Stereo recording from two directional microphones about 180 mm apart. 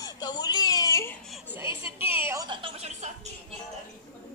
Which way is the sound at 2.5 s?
30° right (ahead or behind).